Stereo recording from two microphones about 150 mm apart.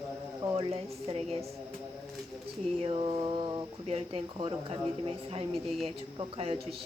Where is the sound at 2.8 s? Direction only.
40° right (ahead or behind).